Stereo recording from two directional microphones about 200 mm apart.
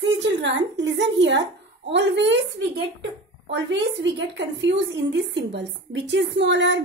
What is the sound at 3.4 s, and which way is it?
A woman's voice, 65° right (ahead or behind).